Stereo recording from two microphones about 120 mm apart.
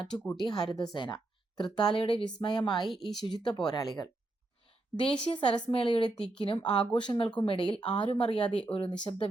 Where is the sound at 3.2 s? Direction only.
40° left (ahead or behind).